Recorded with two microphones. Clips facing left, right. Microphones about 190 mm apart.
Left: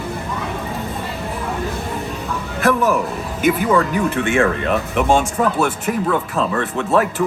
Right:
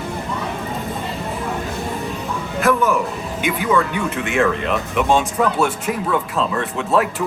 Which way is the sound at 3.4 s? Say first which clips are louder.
Left 3 dB; 40° left (ahead or behind).